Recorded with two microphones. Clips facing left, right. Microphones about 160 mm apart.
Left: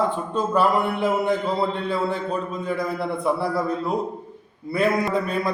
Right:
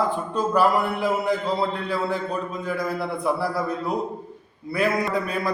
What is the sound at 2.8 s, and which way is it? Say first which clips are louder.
A man's voice: left 1 dB; centre (ahead or behind).